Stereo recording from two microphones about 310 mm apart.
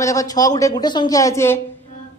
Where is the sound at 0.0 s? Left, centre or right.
Centre.